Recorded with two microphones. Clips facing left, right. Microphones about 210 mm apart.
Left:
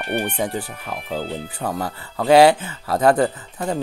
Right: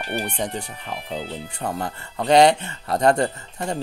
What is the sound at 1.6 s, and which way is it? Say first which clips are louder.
Speech: left 1 dB; 5° left (ahead or behind).